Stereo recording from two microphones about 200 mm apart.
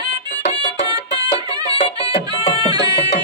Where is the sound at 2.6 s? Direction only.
20° right (ahead or behind).